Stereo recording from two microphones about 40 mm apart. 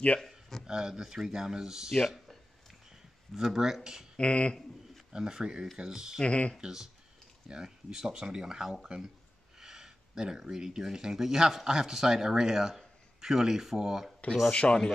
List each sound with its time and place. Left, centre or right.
0.7 s speech: centre
2.0 s a sound: centre
3.5 s speech: centre
4.2 s speech: left
5.1 s speech: centre
6.2 s speech: left
6.6 s speech: centre
14.5 s speech: left